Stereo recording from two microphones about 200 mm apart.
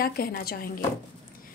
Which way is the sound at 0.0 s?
50° left (ahead or behind).